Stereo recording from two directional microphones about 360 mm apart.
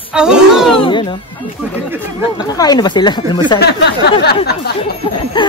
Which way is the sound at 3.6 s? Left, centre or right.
Left.